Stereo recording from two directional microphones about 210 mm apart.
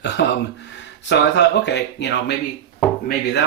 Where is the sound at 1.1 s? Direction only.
55° left (ahead or behind).